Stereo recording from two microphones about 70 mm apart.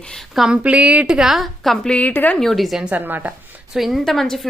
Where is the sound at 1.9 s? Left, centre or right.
Left.